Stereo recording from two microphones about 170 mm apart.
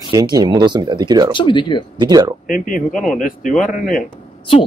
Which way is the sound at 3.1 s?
50° left (ahead or behind).